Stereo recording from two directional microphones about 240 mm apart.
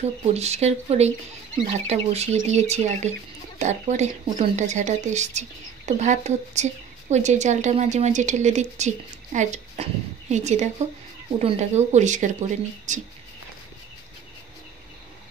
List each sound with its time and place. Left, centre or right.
0.0 s a woman's voice: right